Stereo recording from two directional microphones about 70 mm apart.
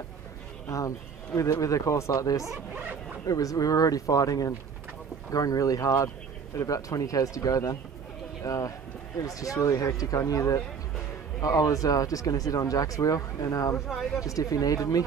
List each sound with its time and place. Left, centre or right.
0.7 s speech: left
13.8 s speech: centre
14.2 s speech: left